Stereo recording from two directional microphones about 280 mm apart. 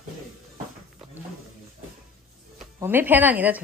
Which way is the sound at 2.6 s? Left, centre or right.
Centre.